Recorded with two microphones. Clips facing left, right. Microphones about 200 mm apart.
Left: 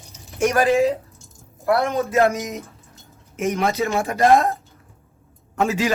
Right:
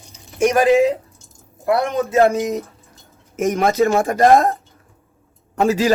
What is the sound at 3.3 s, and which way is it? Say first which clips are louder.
Speech: right 5 dB; 50° right (ahead or behind).